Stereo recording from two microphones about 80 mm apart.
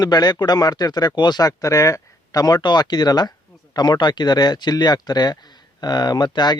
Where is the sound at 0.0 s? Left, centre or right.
Left.